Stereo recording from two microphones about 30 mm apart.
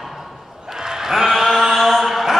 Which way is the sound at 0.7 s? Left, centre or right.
Centre.